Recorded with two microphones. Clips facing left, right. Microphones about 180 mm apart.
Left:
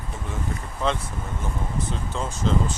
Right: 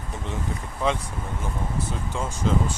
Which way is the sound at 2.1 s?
10° right (ahead or behind).